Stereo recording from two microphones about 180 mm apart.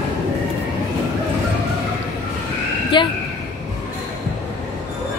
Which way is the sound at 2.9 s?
25° left (ahead or behind).